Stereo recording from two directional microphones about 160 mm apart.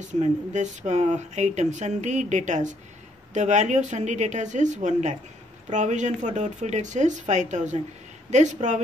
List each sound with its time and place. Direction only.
0.1 s speech: 50° right (ahead or behind)